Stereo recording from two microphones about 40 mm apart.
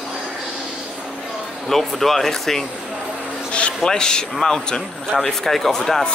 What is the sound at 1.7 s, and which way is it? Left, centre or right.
Speech, centre.